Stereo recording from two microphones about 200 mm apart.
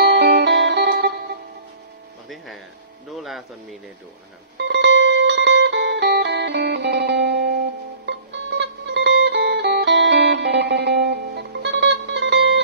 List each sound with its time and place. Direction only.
0.0 s music: 55° right (ahead or behind)
2.2 s a sound: centre (ahead or behind)
4.6 s music: 60° right (ahead or behind)